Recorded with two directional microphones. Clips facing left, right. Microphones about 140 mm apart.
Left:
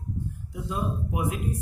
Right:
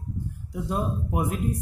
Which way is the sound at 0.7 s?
45° right (ahead or behind).